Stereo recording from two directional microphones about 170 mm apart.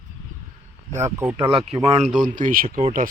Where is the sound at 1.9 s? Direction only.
40° right (ahead or behind).